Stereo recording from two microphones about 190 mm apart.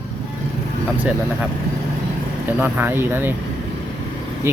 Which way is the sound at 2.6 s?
10° right (ahead or behind).